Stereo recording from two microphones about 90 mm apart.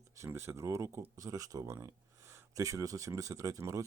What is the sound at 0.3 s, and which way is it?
Speech, 30° right (ahead or behind).